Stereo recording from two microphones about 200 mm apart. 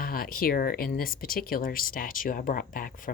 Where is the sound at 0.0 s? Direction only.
45° left (ahead or behind).